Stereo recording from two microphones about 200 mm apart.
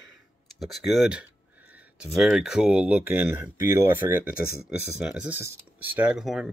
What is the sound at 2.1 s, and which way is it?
Speech, centre (ahead or behind).